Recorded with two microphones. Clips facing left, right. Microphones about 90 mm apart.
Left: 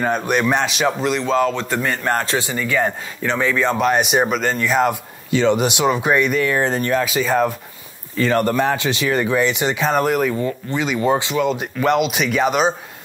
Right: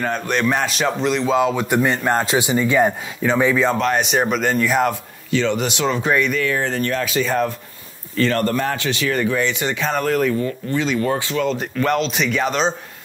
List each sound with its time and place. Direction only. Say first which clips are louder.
0.0 s speech: left 2 dB; 10° left (ahead or behind); by 2.9 s 20° right (ahead or behind)
3.2 s speech: right 3 dB; 5° right (ahead or behind)
3.7 s speech: left 2 dB; 10° left (ahead or behind)
4.3 s speech: right 1 dB; 5° right (ahead or behind)
5.3 s speech: left 3 dB; 15° left (ahead or behind)
11.3 s speech: left 1 dB; 10° left (ahead or behind)